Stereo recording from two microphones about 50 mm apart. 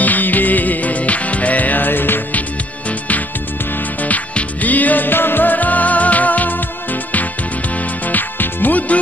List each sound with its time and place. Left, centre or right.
0.0 s music: left
4.0 s music: left